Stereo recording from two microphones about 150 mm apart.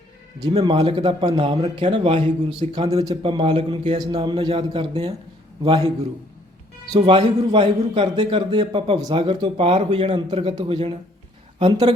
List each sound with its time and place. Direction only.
0.6 s a man's voice: 35° right (ahead or behind)
3.9 s a man's voice: 25° right (ahead or behind)
6.9 s a man's voice: 35° right (ahead or behind)
9.6 s speech: 45° right (ahead or behind)
10.1 s a man's voice: 30° right (ahead or behind)